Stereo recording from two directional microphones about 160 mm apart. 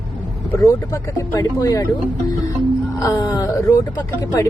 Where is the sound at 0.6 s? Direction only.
20° left (ahead or behind).